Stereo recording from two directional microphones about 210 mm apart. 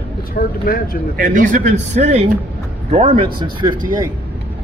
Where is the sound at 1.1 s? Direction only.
40° right (ahead or behind); by 3.9 s 20° right (ahead or behind).